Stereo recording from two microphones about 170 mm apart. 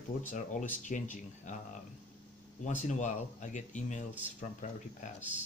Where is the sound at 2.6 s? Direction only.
45° left (ahead or behind).